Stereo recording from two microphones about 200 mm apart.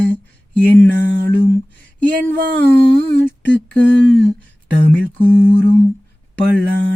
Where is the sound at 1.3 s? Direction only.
10° left (ahead or behind).